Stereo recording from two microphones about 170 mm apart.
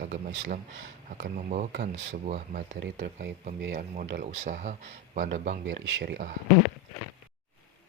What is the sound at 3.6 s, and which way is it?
Speech, 90° right.